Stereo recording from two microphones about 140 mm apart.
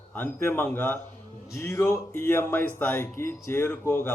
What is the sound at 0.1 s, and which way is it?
Speech, 15° left (ahead or behind).